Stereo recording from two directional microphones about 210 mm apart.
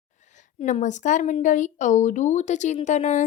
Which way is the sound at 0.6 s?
35° left (ahead or behind).